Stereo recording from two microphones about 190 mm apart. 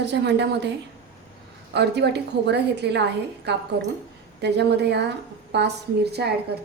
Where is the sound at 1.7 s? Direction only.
60° right (ahead or behind).